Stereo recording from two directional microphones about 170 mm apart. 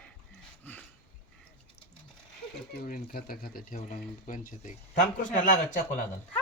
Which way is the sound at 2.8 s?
55° left (ahead or behind).